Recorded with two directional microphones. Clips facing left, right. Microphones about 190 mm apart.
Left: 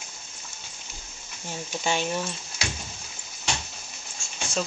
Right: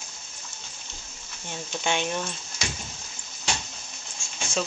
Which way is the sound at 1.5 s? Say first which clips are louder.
Even; 5° left (ahead or behind).